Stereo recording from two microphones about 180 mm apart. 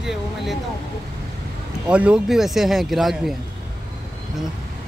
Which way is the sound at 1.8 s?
5° right (ahead or behind).